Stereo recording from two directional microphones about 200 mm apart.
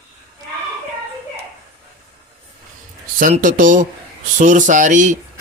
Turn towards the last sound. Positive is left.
turn(degrees=-40)  # may be behind; listen again after turning